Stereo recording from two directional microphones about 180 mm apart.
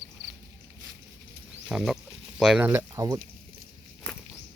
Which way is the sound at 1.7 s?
5° right (ahead or behind).